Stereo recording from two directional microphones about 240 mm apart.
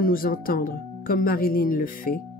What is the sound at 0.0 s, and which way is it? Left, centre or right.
Speech, left.